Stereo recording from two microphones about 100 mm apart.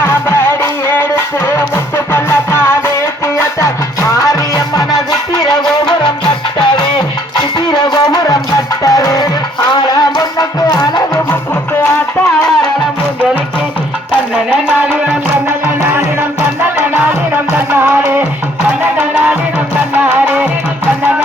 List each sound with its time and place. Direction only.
0.0 s music: 25° left (ahead or behind)
7.7 s music: 40° left (ahead or behind)
17.3 s music: 20° right (ahead or behind)